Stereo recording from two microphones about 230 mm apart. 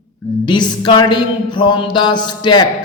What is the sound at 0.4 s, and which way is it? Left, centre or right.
A man's voice, centre.